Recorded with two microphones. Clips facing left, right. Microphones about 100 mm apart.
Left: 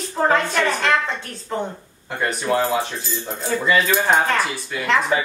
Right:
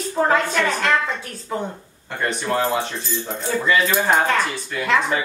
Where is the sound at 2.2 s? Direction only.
Centre (ahead or behind).